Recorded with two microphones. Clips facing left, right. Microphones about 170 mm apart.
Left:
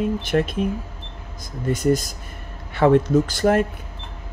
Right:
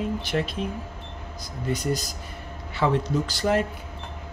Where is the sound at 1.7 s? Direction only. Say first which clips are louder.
Left 7 dB; 50° left (ahead or behind).